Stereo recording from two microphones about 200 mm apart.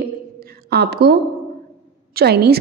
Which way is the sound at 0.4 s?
55° right (ahead or behind).